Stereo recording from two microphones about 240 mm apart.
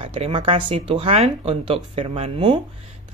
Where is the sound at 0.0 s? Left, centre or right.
Right.